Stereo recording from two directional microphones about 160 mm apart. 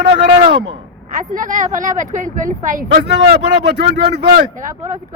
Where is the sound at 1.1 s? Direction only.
55° right (ahead or behind).